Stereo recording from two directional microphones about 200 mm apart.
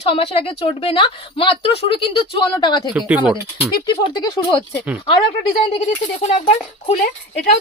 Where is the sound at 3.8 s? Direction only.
25° left (ahead or behind).